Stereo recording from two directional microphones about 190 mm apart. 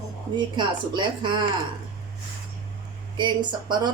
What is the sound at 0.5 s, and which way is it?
Speech, 25° right (ahead or behind).